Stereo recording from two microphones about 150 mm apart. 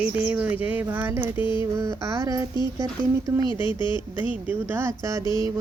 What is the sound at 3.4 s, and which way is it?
Speech, 30° left (ahead or behind).